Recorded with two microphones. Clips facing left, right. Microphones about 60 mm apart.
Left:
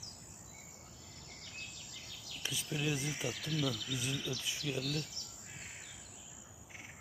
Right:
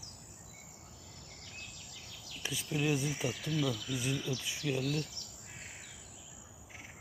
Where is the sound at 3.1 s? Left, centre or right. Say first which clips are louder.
Right 3 dB; centre.